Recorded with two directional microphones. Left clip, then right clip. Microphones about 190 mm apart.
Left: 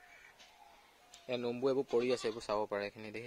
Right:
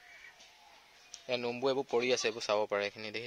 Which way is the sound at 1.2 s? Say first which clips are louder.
Right 2 dB; centre (ahead or behind).